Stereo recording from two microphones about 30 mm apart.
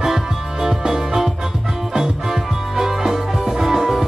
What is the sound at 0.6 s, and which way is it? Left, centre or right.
Music, centre.